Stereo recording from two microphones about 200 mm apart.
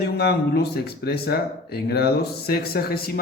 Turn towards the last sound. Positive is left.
turn(degrees=50)  # may be behind; listen again after turning